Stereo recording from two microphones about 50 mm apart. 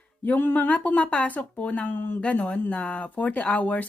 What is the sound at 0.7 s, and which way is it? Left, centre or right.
Speech, left.